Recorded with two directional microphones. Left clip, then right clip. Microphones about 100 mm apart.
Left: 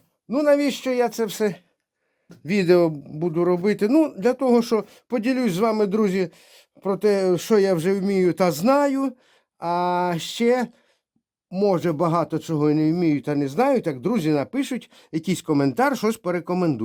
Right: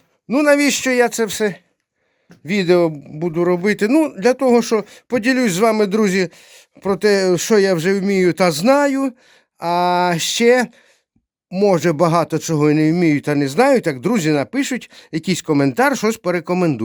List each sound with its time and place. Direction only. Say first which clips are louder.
0.3 s speech: right 5 dB; 55° right (ahead or behind)
1.0 s speech: right 5 dB; 25° right (ahead or behind)
2.5 s speech: right 3 dB; 15° right (ahead or behind)